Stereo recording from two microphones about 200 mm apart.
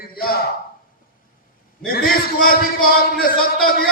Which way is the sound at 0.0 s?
50° left (ahead or behind).